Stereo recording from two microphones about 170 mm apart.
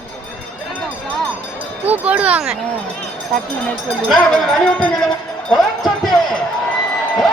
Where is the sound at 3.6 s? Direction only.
Centre (ahead or behind).